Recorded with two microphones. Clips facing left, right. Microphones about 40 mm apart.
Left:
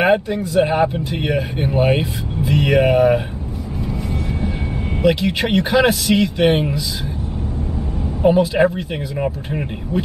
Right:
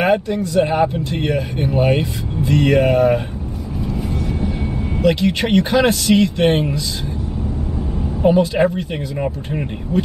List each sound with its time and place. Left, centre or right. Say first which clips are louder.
0.0 s speech: left 1 dB; centre
3.9 s vehicle: right 2 dB; centre
5.0 s speech: even; centre
8.2 s speech: even; centre